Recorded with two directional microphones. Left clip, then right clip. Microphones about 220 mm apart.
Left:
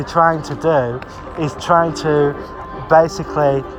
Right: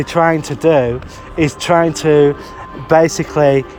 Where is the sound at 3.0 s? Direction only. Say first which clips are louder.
Right 6 dB; 90° right.